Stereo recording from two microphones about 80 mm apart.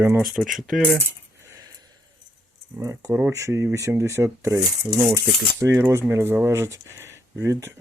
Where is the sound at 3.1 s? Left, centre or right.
Right.